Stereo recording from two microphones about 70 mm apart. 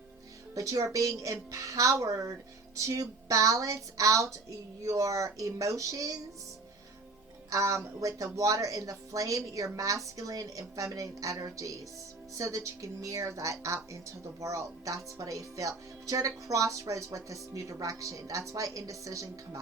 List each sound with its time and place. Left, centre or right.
0.5 s speech: right
7.5 s speech: right